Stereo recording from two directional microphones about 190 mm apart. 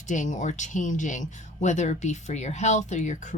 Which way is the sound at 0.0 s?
40° left (ahead or behind).